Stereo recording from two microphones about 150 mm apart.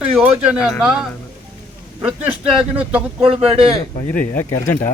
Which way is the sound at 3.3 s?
40° right (ahead or behind).